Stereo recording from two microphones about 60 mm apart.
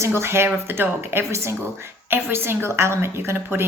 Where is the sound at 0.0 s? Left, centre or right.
Right.